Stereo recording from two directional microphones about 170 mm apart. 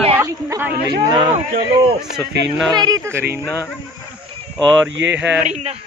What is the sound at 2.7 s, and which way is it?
Speech, 20° right (ahead or behind).